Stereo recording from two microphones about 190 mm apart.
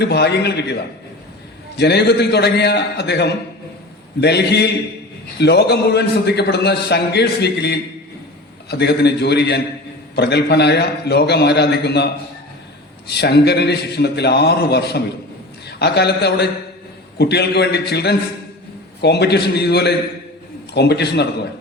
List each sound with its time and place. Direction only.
0.0 s a man's voice: 60° left (ahead or behind)
13.1 s a man's voice: 60° left (ahead or behind)